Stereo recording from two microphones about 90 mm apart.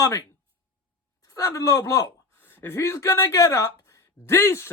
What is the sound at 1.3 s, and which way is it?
Speech, 40° left (ahead or behind).